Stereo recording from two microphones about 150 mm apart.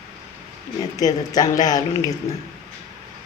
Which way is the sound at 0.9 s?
25° left (ahead or behind).